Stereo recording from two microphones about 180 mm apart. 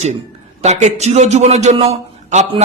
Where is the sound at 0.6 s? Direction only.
40° right (ahead or behind).